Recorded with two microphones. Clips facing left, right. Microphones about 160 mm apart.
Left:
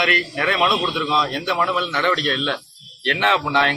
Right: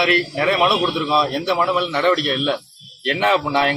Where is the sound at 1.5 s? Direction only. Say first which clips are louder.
Right 3 dB; 20° right (ahead or behind).